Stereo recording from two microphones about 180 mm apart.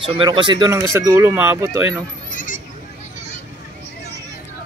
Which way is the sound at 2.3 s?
45° left (ahead or behind).